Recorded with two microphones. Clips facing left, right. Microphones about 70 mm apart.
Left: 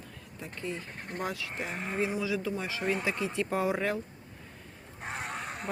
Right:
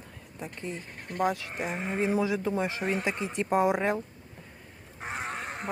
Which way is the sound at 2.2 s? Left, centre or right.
Right.